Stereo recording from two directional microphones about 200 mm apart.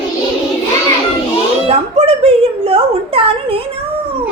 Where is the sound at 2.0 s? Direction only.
30° right (ahead or behind).